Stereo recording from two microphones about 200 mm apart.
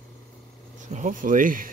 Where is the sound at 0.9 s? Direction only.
40° right (ahead or behind).